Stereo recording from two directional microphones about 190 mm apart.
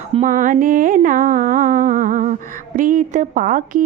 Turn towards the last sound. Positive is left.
turn(degrees=-45)  # may be behind; listen again after turning